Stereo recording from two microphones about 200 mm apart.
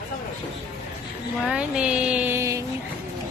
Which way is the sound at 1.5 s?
5° right (ahead or behind).